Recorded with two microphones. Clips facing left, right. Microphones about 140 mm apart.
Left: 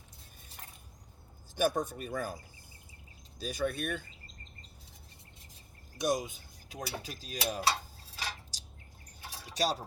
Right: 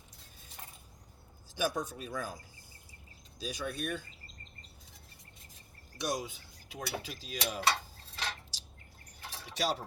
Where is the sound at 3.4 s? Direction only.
50° left (ahead or behind).